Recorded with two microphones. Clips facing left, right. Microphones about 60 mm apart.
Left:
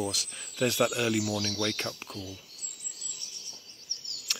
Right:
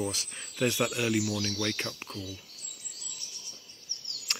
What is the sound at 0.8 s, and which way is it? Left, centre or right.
Speech, centre.